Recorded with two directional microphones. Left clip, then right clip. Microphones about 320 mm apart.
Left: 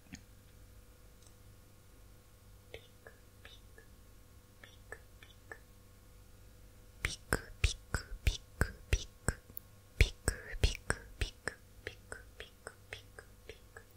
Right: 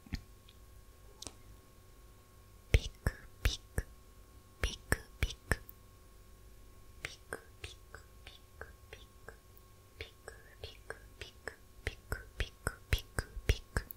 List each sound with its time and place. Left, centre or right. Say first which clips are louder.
0.1 s tick-tock: right 5 dB; centre
2.7 s whispering: right 15 dB; right
4.6 s whispering: right 15 dB; right
7.0 s whispering: left 7 dB; left
11.8 s whispering: right 4 dB; centre; by 13.8 s right